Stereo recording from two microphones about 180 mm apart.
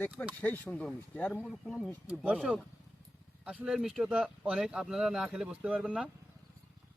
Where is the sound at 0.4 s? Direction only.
10° left (ahead or behind); by 6.1 s 5° right (ahead or behind).